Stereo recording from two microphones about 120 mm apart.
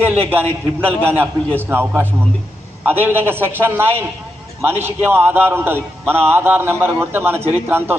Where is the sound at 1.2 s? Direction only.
20° right (ahead or behind).